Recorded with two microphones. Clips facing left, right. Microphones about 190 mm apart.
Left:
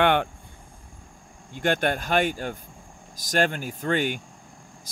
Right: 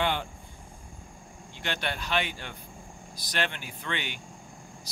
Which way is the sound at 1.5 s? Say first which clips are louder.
Left 10 dB; 50° left (ahead or behind).